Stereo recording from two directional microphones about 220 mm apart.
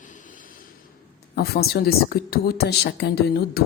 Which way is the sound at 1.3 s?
45° left (ahead or behind).